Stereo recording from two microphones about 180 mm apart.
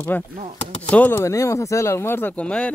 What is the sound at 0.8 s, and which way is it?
Speech, 10° left (ahead or behind).